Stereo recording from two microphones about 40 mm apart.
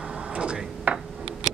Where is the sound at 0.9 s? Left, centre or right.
Right.